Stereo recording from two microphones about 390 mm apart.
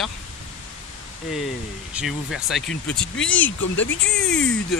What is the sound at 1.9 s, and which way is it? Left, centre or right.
Speech, centre.